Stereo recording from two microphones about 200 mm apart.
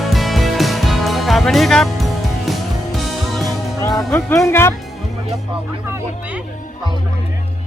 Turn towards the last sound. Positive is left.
turn(degrees=-10)  # may be behind; listen again after turning